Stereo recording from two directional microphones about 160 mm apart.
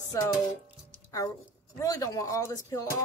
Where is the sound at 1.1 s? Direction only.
20° left (ahead or behind).